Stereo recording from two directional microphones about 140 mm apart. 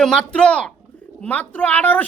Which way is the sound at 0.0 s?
5° left (ahead or behind).